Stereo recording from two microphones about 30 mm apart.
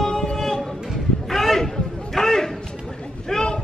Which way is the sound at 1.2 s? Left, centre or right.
Centre.